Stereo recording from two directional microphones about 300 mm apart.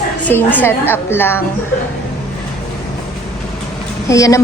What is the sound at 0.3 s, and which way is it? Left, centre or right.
A woman's voice, centre.